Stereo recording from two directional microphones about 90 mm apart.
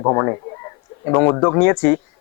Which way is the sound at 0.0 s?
25° left (ahead or behind).